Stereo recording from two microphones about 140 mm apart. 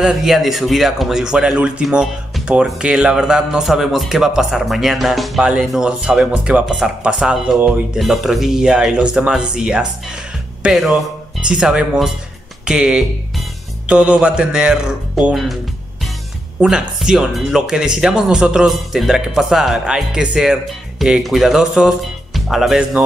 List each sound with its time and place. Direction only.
0.0 s a man's voice: centre (ahead or behind)
16.6 s speech: 5° right (ahead or behind)